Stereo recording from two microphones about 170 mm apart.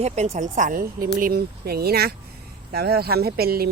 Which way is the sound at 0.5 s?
50° right (ahead or behind).